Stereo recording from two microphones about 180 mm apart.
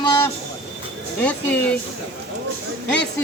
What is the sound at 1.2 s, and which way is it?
Speech, 10° left (ahead or behind).